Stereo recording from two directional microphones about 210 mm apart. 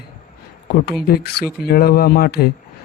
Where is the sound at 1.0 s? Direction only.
50° left (ahead or behind).